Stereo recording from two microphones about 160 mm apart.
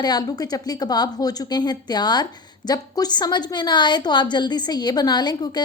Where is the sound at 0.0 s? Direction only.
25° left (ahead or behind).